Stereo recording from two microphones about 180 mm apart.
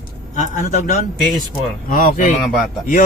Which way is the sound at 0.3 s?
45° left (ahead or behind).